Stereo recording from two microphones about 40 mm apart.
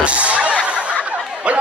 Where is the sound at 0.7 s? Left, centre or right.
Right.